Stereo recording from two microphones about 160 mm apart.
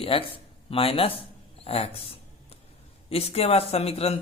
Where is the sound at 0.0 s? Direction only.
35° left (ahead or behind).